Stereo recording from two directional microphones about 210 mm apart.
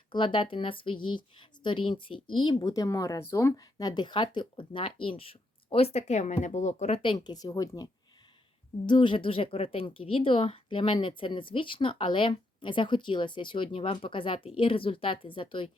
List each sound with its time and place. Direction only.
0.1 s speech: 25° left (ahead or behind)
8.9 s speech: 25° left (ahead or behind)